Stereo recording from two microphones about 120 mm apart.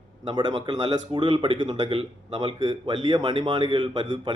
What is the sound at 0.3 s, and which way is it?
A man's voice, 40° right (ahead or behind).